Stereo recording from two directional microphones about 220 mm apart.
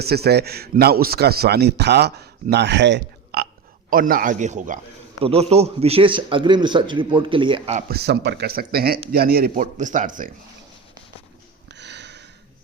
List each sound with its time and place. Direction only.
0.0 s a man's voice: 45° right (ahead or behind)
3.8 s a man's voice: 40° right (ahead or behind)
7.9 s a man's voice: 45° right (ahead or behind)
11.7 s a sound: 50° right (ahead or behind)